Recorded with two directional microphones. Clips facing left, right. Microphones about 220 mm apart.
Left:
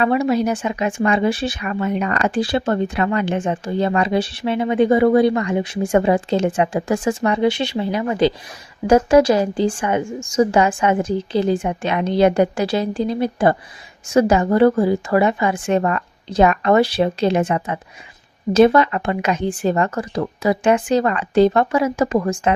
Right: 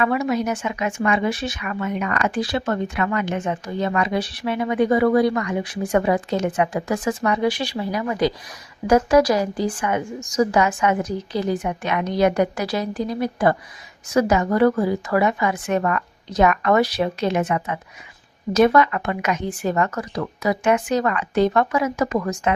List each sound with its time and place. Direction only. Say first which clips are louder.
0.0 s speech: left 4 dB; 30° left (ahead or behind)